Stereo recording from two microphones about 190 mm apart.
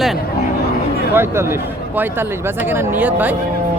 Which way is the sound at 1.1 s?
10° right (ahead or behind).